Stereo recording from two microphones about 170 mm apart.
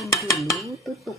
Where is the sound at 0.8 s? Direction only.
Centre (ahead or behind).